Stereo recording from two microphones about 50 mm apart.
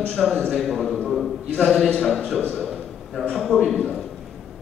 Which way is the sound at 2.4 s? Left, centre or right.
Left.